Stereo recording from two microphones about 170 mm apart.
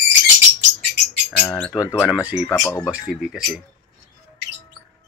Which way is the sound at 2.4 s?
15° left (ahead or behind).